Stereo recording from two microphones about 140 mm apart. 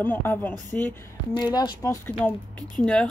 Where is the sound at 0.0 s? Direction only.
15° left (ahead or behind).